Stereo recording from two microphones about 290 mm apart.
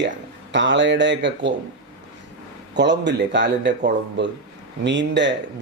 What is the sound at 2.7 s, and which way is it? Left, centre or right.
Speech, right.